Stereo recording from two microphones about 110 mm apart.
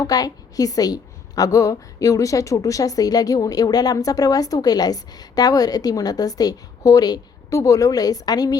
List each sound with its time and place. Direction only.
0.0 s a woman's voice: 35° left (ahead or behind)